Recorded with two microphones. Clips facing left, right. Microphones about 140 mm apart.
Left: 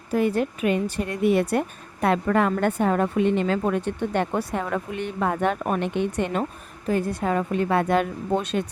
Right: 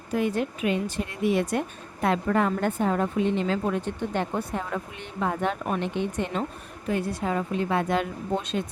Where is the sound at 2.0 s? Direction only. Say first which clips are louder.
Left 3 dB; 65° left (ahead or behind).